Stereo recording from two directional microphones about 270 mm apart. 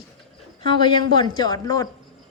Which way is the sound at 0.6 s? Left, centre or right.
Centre.